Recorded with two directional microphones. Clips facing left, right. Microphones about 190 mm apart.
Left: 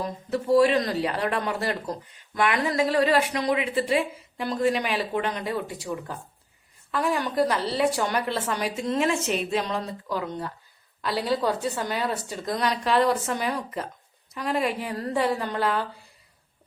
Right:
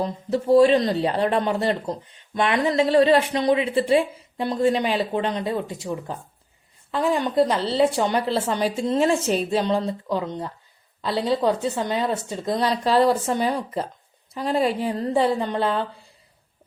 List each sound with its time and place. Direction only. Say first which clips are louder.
0.0 s speech: right 4 dB; 25° right (ahead or behind)